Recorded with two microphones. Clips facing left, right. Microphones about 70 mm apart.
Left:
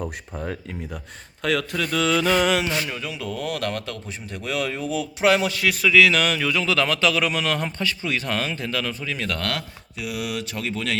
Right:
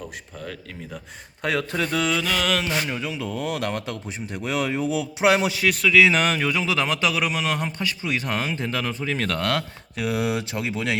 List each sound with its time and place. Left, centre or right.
1.4 s speech: right
2.2 s mantra: centre
2.7 s speech: centre
6.0 s speech: right
6.5 s speech: centre
9.1 s speech: right
9.4 s speech: right